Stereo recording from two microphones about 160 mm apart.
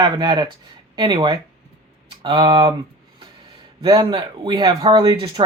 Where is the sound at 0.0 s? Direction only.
25° right (ahead or behind).